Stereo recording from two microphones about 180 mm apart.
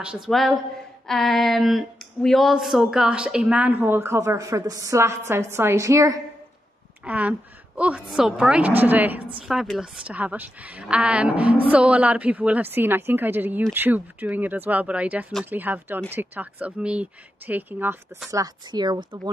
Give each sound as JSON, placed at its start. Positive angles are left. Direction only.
{"t": 0.0, "sound": "a woman's voice", "side_deg": -5}
{"t": 18.3, "sound": "speech", "side_deg": -20}